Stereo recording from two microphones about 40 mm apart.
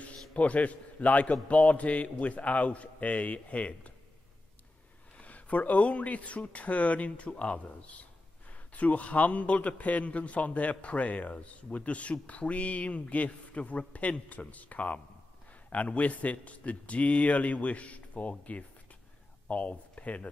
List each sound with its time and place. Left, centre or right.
0.0 s a man's voice: left
5.1 s a man's voice: left